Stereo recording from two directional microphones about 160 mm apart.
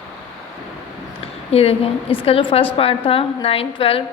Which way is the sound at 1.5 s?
40° left (ahead or behind).